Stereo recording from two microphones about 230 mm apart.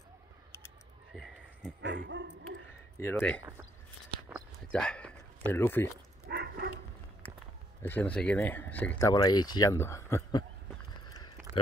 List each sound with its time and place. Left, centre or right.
1.1 s a sound: centre
1.8 s speech: right
3.0 s speech: centre
4.6 s speech: centre
6.2 s dog: right
7.8 s speech: centre
9.1 s speech: centre